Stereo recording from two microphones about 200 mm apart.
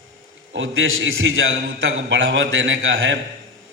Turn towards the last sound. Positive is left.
turn(degrees=-75)  # may be behind; listen again after turning